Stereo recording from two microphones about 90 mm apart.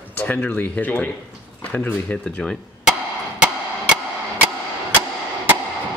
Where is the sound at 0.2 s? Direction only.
15° left (ahead or behind).